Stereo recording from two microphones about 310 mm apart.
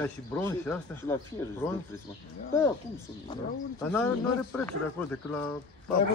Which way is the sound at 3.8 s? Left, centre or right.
Centre.